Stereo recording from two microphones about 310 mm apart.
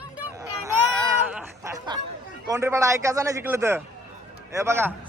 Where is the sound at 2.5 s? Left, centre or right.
Centre.